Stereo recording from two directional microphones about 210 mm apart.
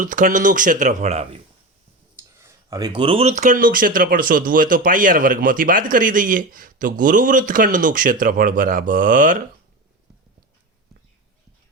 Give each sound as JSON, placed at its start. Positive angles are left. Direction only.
{"t": 0.0, "sound": "speech", "side_deg": -40}
{"t": 2.4, "sound": "speech", "side_deg": -15}